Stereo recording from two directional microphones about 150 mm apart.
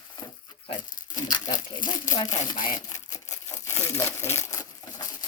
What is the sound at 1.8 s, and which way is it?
Speech, 25° left (ahead or behind).